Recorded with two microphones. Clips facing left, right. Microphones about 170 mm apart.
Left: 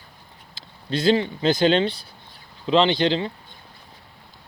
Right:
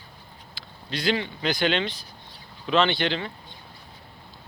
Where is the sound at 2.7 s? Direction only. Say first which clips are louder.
Left 4 dB; 20° left (ahead or behind).